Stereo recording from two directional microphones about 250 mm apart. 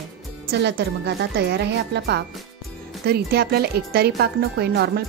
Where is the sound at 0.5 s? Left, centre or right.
Right.